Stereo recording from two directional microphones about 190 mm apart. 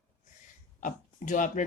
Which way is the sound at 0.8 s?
40° left (ahead or behind).